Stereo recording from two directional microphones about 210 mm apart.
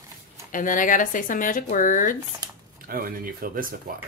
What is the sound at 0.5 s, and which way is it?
Speech, 40° left (ahead or behind).